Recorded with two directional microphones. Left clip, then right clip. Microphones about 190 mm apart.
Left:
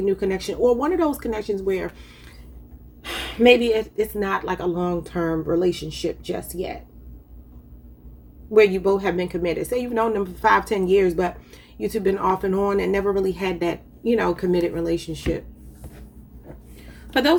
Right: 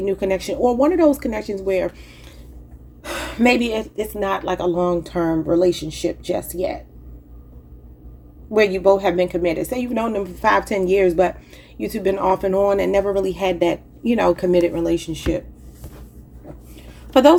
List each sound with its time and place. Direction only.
0.0 s a woman's voice: 25° right (ahead or behind)
3.0 s a woman's voice: 25° right (ahead or behind)
8.5 s a woman's voice: 25° right (ahead or behind)